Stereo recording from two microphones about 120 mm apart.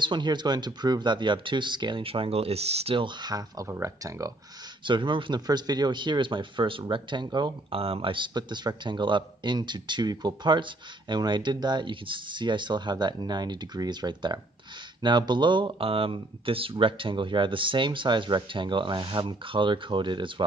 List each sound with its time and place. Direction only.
0.0 s a man's voice: 40° right (ahead or behind)
4.8 s a man's voice: 40° right (ahead or behind)
7.8 s a man's voice: 50° right (ahead or behind)